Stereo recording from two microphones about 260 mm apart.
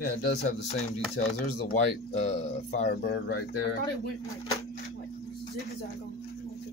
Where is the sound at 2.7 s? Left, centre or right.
Left.